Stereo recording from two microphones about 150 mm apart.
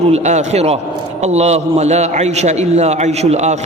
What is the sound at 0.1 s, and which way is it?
A man's voice, 50° right (ahead or behind).